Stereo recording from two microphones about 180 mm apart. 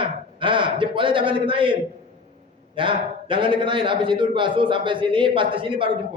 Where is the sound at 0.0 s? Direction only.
30° right (ahead or behind).